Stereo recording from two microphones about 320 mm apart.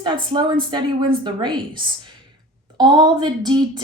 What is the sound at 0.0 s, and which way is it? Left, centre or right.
A woman's voice, centre.